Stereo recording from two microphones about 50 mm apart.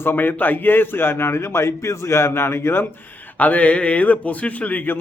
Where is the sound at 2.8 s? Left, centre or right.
Left.